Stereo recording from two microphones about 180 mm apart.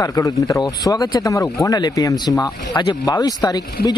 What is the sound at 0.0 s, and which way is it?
Speech, 20° left (ahead or behind).